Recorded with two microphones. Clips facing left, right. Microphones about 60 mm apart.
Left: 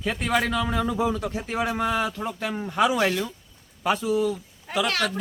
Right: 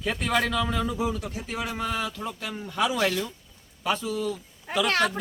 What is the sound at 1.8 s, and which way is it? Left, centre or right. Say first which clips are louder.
Speech: left 4 dB; left.